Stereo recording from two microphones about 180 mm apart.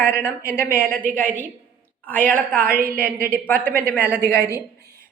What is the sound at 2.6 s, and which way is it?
Speech, 55° right (ahead or behind).